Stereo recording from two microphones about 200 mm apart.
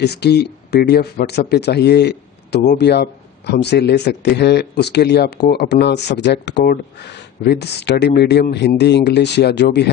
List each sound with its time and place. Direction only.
0.0 s speech: 55° left (ahead or behind)